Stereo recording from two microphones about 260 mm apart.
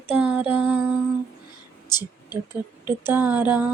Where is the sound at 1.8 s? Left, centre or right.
Centre.